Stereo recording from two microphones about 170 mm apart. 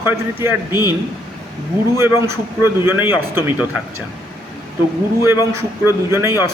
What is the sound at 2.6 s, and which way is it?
A man's voice, 15° right (ahead or behind).